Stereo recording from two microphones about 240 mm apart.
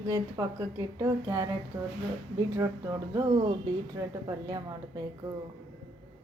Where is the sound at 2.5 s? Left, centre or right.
Centre.